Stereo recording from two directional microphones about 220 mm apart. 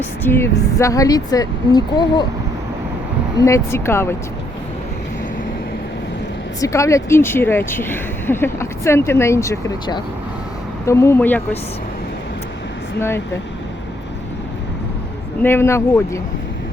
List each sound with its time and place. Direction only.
0.2 s speech: 10° left (ahead or behind)
3.4 s speech: 10° left (ahead or behind)
6.6 s speech: 15° left (ahead or behind)
13.0 s speech: 10° left (ahead or behind)
15.4 s speech: 10° left (ahead or behind)